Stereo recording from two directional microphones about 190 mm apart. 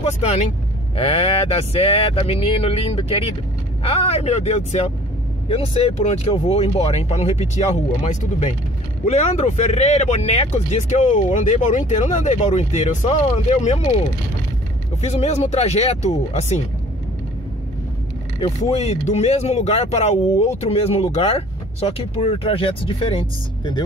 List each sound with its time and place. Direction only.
0.9 s speech: 30° left (ahead or behind)
18.4 s speech: 30° left (ahead or behind)